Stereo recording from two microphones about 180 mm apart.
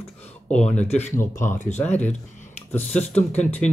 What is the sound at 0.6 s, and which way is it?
Speech, 40° left (ahead or behind).